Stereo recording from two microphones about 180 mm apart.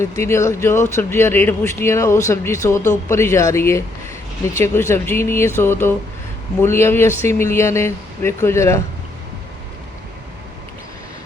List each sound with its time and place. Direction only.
0.2 s speech: 15° left (ahead or behind)